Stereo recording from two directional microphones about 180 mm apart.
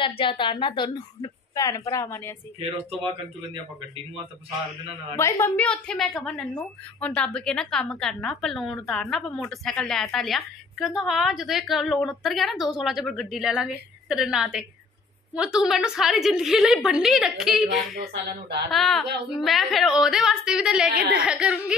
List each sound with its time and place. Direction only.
0.0 s a woman's voice: 30° left (ahead or behind); by 2.3 s 15° left (ahead or behind)
2.6 s speech: 25° right (ahead or behind)
5.1 s a woman's voice: 15° left (ahead or behind); by 17.6 s centre (ahead or behind)
17.9 s speech: 70° right (ahead or behind)
18.7 s a woman's voice: centre (ahead or behind)